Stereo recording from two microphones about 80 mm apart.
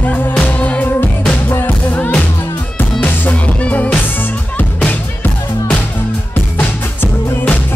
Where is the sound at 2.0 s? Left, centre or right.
Centre.